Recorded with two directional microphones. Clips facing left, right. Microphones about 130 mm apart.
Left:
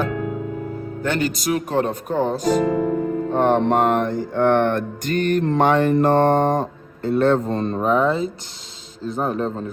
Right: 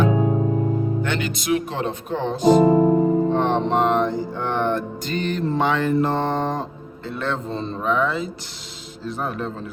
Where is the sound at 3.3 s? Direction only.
50° left (ahead or behind).